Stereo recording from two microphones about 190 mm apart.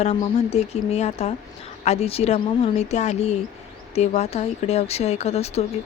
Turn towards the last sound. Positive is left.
turn(degrees=35)  # may be behind; listen again after turning